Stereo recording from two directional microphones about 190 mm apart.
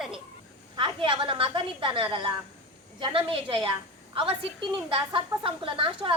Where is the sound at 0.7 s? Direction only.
25° right (ahead or behind).